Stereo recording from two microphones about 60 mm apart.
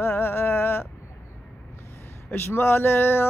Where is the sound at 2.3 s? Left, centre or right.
Left.